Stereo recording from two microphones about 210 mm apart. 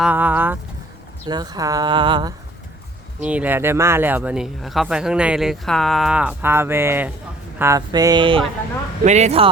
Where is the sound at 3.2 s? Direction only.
5° right (ahead or behind); by 8.4 s 20° right (ahead or behind).